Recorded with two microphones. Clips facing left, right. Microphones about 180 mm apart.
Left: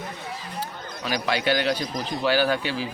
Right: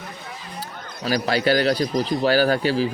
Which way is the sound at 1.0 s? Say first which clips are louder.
Right 4 dB; 40° right (ahead or behind).